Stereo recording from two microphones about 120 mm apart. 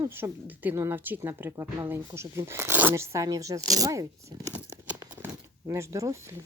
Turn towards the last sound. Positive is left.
turn(degrees=-25)  # may be behind; listen again after turning